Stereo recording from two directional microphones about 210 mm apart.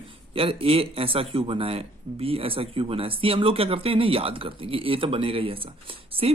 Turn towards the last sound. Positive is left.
turn(degrees=-25)  # may be behind; listen again after turning